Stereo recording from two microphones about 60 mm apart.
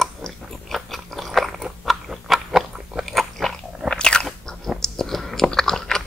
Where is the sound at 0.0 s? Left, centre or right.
Centre.